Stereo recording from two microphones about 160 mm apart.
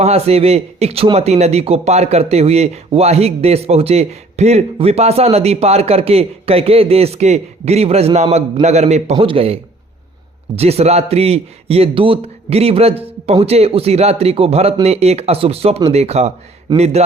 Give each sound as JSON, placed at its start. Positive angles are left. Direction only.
{"t": 0.0, "sound": "a man's voice", "side_deg": -40}